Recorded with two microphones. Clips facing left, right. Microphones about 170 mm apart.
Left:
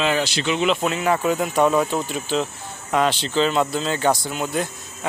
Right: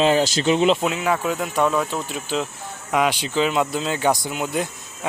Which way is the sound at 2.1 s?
5° right (ahead or behind).